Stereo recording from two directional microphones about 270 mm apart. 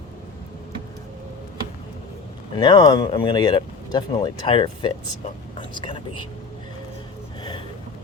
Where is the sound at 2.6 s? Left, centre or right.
Centre.